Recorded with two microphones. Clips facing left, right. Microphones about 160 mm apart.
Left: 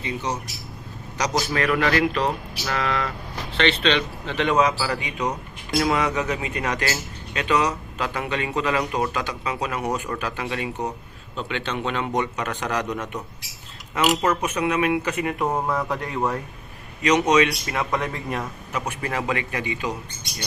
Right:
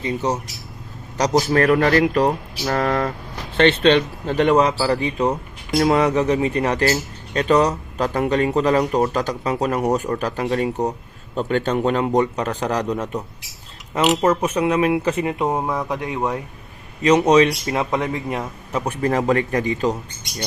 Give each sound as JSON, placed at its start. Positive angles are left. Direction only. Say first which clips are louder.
{"t": 0.0, "sound": "a man's voice", "louder": "right 6 dB", "side_deg": -35}
{"t": 15.5, "sound": "speech", "louder": "right 2 dB", "side_deg": -15}
{"t": 17.0, "sound": "a man's voice", "louder": "right 5 dB", "side_deg": -30}
{"t": 18.7, "sound": "speech", "louder": "right 8 dB", "side_deg": -35}